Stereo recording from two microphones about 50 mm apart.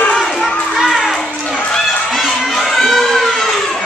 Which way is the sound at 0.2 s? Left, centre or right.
Centre.